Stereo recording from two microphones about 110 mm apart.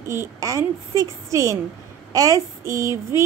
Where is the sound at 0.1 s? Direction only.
25° right (ahead or behind).